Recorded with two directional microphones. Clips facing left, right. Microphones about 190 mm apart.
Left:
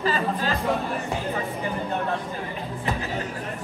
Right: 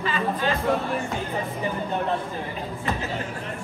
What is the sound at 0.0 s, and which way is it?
Music, 40° left (ahead or behind).